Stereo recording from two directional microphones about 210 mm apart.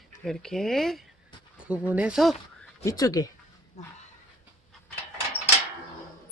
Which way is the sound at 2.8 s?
15° left (ahead or behind).